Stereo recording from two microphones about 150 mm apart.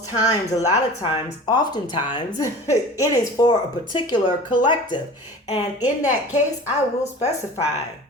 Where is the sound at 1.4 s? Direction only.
30° left (ahead or behind).